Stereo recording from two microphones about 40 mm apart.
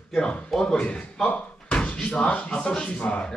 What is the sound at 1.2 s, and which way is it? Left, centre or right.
Speech, left.